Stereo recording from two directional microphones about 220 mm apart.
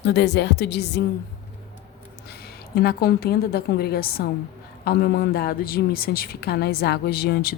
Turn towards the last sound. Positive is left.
turn(degrees=45)  # may be behind; listen again after turning